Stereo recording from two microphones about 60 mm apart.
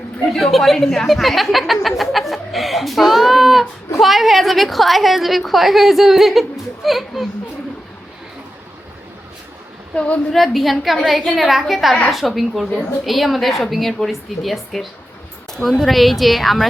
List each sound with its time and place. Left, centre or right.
0.3 s a woman's voice: centre
9.9 s a woman's voice: centre
10.3 s a woman's voice: centre